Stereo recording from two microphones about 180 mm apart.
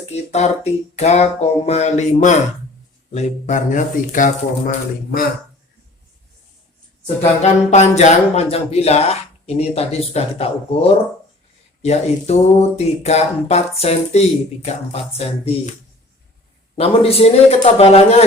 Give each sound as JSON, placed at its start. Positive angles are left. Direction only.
{"t": 0.1, "sound": "speech", "side_deg": 35}
{"t": 7.2, "sound": "speech", "side_deg": 40}
{"t": 16.7, "sound": "speech", "side_deg": 30}